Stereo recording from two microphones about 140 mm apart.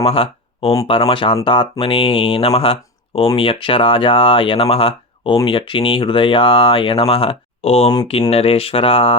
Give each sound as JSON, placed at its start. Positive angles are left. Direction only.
{"t": 0.0, "sound": "speech", "side_deg": 40}